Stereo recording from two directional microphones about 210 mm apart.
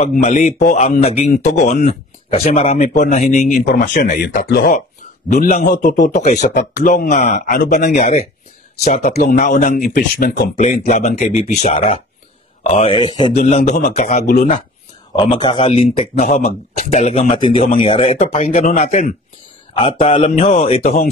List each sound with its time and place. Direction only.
0.0 s speech: 35° left (ahead or behind)
9.0 s speech: 45° left (ahead or behind)
10.6 s speech: 30° left (ahead or behind)
13.5 s speech: 35° left (ahead or behind)
15.1 s speech: 20° left (ahead or behind)
16.2 s speech: 40° left (ahead or behind)
20.8 s speech: 40° left (ahead or behind)